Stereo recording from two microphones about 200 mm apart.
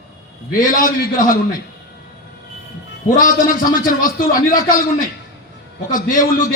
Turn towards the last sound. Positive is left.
turn(degrees=45)  # may be behind; listen again after turning